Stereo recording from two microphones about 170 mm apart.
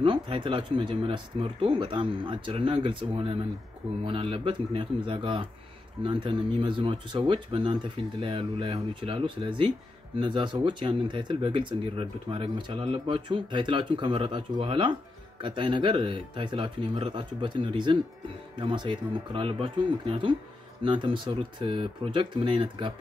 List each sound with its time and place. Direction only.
0.0 s speech: 30° right (ahead or behind)